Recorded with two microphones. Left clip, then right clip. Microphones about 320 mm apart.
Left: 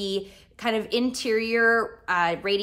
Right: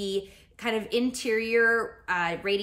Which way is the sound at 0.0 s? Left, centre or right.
Centre.